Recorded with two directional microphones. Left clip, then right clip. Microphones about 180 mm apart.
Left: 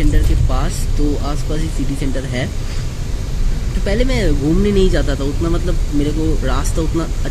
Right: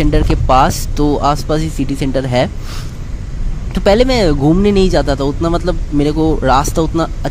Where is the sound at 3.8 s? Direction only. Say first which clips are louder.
Right 9 dB; 45° right (ahead or behind).